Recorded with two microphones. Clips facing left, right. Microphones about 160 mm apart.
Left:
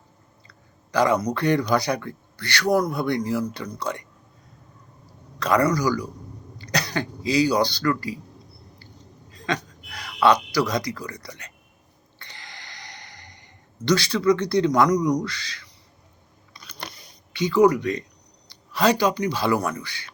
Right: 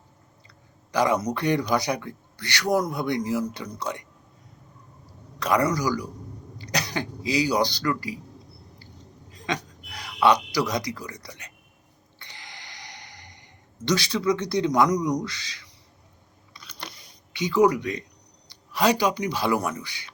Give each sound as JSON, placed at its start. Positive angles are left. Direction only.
{"t": 0.4, "sound": "speech", "side_deg": -15}
{"t": 5.4, "sound": "speech", "side_deg": -15}
{"t": 9.3, "sound": "speech", "side_deg": -15}
{"t": 12.2, "sound": "sigh", "side_deg": -15}
{"t": 16.6, "sound": "a sound", "side_deg": 45}
{"t": 17.3, "sound": "speech", "side_deg": -15}